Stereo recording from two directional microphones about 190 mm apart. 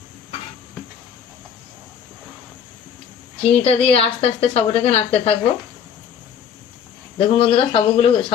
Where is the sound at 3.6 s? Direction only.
30° left (ahead or behind).